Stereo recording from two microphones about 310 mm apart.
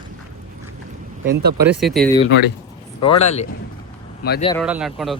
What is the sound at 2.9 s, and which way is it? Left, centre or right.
Speech, centre.